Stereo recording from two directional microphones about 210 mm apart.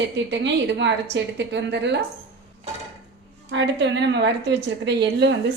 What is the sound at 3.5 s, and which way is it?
A woman's voice, 60° right (ahead or behind).